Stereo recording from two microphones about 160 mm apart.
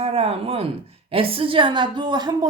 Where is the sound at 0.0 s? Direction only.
40° right (ahead or behind).